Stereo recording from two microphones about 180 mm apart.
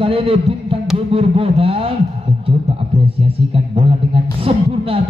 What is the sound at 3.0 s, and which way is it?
Speech, 30° right (ahead or behind).